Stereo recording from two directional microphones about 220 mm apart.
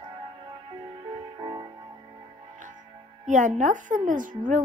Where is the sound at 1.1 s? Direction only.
20° right (ahead or behind).